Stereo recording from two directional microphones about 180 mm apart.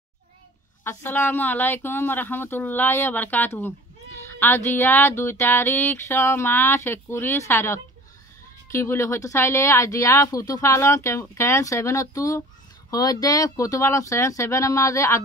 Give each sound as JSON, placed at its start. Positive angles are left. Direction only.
{"t": 0.8, "sound": "speech", "side_deg": 10}
{"t": 4.3, "sound": "a sound", "side_deg": 10}
{"t": 4.7, "sound": "speech", "side_deg": 10}